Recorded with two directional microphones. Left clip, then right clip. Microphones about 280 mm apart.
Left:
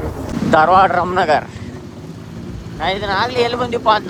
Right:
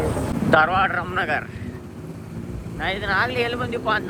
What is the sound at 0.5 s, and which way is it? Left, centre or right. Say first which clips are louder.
Speech: left 7 dB; centre.